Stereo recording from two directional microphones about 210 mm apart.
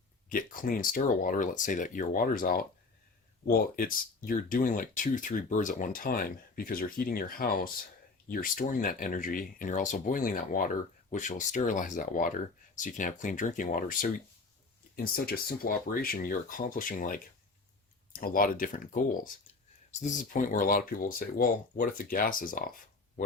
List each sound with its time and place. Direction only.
0.3 s speech: 40° left (ahead or behind)